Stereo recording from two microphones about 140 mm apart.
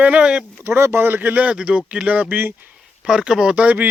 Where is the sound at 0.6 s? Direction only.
15° right (ahead or behind).